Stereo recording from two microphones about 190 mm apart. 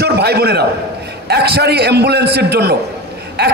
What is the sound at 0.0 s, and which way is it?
A man's voice, 60° right (ahead or behind).